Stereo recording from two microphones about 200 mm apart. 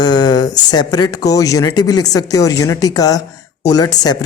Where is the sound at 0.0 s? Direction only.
20° left (ahead or behind).